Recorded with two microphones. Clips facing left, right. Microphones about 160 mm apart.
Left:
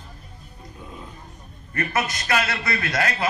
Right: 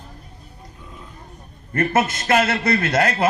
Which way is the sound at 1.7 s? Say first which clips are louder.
Right 6 dB; 50° right (ahead or behind).